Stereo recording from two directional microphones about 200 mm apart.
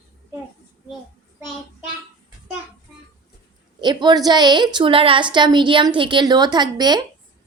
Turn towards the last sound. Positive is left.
turn(degrees=-20)  # may be behind; listen again after turning